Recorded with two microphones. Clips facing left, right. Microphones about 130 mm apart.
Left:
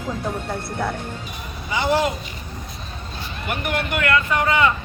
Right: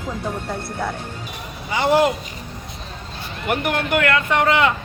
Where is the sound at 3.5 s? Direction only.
60° right (ahead or behind).